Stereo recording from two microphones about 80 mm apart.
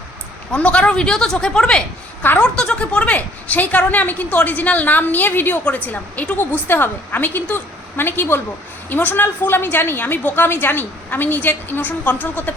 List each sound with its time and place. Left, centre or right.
0.5 s a woman's voice: centre